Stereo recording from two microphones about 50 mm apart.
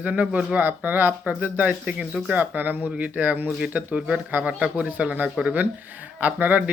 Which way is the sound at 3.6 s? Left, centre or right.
Right.